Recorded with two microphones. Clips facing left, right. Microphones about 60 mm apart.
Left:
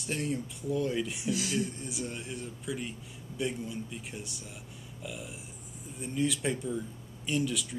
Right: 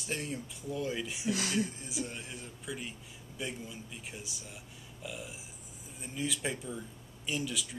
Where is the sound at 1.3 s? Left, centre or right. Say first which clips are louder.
Left 1 dB; right.